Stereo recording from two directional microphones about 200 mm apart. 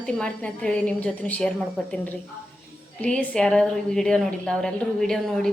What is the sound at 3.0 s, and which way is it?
A woman's voice, 5° left (ahead or behind).